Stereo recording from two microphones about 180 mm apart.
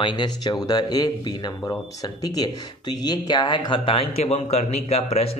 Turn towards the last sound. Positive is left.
turn(degrees=35)  # may be behind; listen again after turning